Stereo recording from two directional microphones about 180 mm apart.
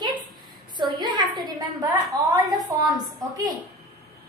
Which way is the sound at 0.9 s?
25° right (ahead or behind).